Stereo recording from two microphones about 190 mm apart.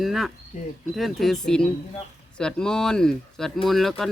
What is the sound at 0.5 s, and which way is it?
Speech, 40° left (ahead or behind).